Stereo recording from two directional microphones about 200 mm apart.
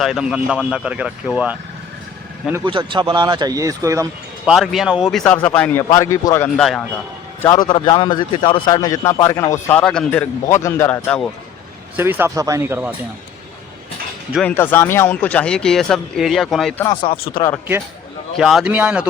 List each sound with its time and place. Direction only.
0.0 s speech: centre (ahead or behind)
2.6 s speech: 25° right (ahead or behind)
4.4 s speech: centre (ahead or behind); by 6.5 s 15° left (ahead or behind)
6.6 s speech: centre (ahead or behind)
7.4 s a man's voice: 20° left (ahead or behind)
11.9 s speech: 10° right (ahead or behind)
14.3 s speech: 10° left (ahead or behind)
16.8 s speech: 25° left (ahead or behind)
18.3 s speech: centre (ahead or behind)